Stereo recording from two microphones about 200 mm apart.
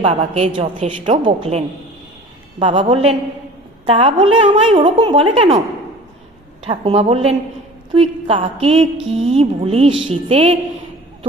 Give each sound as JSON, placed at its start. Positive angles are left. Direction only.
{"t": 0.0, "sound": "a woman's voice", "side_deg": -25}
{"t": 6.7, "sound": "a woman's voice", "side_deg": -30}